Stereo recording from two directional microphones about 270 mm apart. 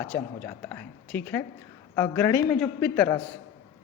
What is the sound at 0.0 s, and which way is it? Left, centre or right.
Speech, centre.